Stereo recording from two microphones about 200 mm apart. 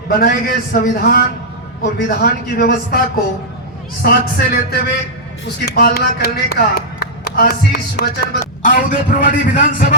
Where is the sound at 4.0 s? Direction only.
50° left (ahead or behind).